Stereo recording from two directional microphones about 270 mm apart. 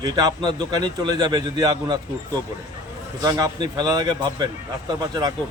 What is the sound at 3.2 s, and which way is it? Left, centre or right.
Speech, centre.